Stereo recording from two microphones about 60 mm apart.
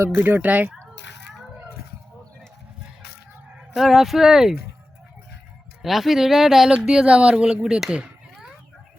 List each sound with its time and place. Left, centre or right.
0.0 s speech: right
3.8 s speech: centre
5.8 s speech: centre